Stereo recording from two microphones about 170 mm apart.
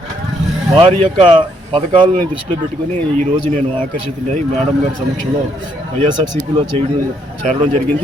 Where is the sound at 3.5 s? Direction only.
45° right (ahead or behind).